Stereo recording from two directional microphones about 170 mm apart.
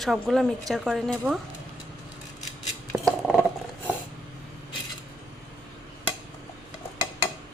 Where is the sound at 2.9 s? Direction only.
Centre (ahead or behind).